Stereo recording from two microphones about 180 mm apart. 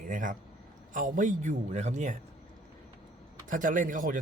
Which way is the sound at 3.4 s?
45° right (ahead or behind).